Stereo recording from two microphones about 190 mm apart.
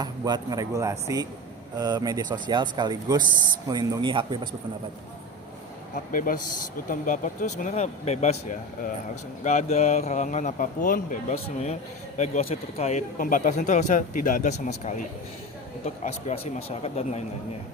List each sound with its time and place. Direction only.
0.0 s speech: 20° right (ahead or behind)
6.1 s speech: 45° left (ahead or behind)
16.0 s speech: 30° left (ahead or behind)